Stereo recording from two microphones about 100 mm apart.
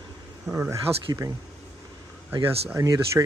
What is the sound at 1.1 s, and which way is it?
Speech, 35° right (ahead or behind).